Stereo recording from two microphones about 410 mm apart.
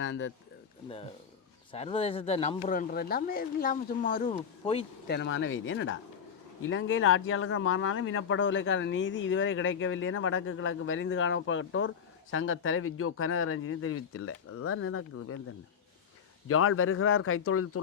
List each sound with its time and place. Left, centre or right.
0.0 s speech: left
1.7 s speech: centre; by 15.4 s left
16.5 s speech: left